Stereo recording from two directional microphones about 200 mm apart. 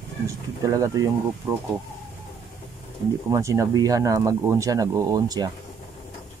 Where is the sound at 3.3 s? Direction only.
15° right (ahead or behind).